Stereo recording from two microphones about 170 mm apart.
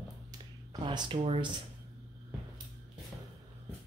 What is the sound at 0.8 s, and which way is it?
Speech, 30° right (ahead or behind).